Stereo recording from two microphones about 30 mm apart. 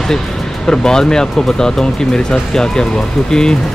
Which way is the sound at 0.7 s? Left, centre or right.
Left.